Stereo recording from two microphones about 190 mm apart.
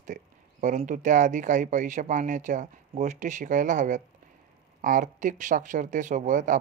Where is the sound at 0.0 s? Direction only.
40° right (ahead or behind).